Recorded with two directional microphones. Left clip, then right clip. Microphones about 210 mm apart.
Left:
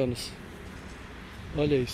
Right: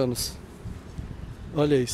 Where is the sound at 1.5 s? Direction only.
25° right (ahead or behind).